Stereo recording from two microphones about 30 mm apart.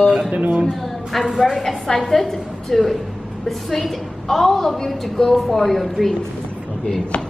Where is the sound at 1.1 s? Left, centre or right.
Centre.